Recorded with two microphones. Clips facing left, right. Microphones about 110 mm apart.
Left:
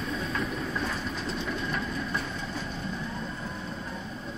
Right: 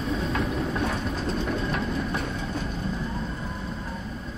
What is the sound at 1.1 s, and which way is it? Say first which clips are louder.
Train: right 5 dB; 40° right (ahead or behind).